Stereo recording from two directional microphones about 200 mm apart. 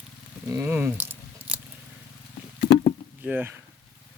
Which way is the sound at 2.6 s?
50° left (ahead or behind).